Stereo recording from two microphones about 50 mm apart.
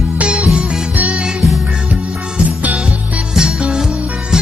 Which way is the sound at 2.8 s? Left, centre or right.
Right.